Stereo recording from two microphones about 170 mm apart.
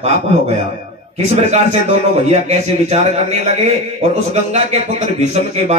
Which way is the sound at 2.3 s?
40° right (ahead or behind).